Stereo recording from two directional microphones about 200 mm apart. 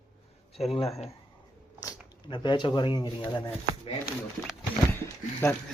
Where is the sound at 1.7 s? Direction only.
20° left (ahead or behind).